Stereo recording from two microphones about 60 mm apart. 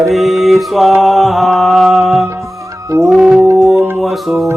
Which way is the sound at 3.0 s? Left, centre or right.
Centre.